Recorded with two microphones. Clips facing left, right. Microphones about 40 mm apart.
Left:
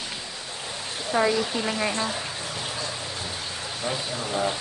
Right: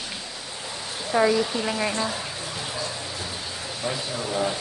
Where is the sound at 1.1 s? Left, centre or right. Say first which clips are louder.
Right 2 dB; centre.